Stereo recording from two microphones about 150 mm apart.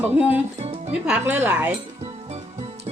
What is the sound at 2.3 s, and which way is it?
Music, 45° right (ahead or behind).